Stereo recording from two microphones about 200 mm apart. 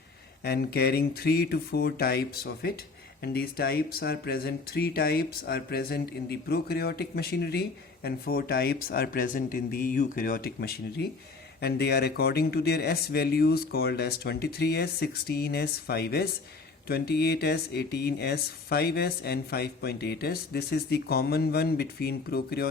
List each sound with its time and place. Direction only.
0.4 s speech: 50° left (ahead or behind)